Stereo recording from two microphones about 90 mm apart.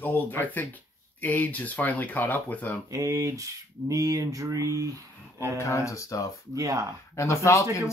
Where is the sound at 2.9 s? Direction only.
40° right (ahead or behind).